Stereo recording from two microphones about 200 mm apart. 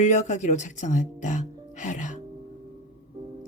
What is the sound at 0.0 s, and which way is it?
Speech, 35° left (ahead or behind).